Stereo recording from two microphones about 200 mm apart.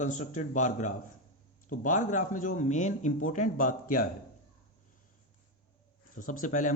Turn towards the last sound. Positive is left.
turn(degrees=40)  # may be behind; listen again after turning